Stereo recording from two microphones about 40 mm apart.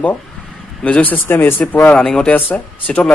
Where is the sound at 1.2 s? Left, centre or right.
Left.